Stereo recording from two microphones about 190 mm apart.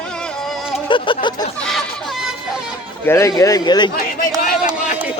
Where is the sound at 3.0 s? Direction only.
15° left (ahead or behind).